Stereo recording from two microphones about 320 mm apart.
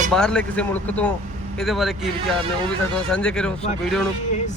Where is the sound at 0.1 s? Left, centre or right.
Centre.